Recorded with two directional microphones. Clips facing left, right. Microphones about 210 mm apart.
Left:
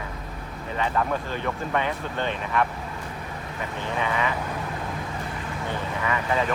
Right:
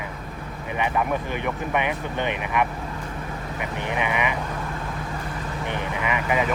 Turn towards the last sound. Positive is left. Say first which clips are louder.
# right 1 dB
turn(degrees=-15)  # may be behind; listen again after turning